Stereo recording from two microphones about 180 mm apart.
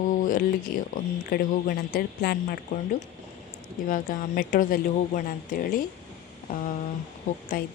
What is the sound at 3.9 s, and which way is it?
A woman's voice, 50° left (ahead or behind).